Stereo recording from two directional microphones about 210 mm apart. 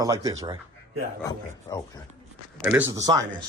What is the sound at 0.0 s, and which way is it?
Speech, 15° right (ahead or behind).